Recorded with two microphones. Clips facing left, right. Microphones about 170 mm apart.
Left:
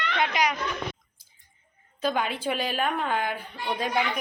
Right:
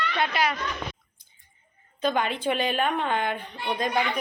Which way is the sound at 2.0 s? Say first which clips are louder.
Right 2 dB; 5° left (ahead or behind).